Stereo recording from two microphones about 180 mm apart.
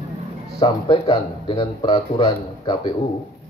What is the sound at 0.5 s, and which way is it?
Speech, 20° left (ahead or behind).